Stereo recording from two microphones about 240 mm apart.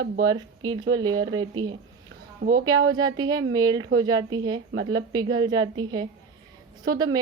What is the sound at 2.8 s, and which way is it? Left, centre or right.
Speech, centre.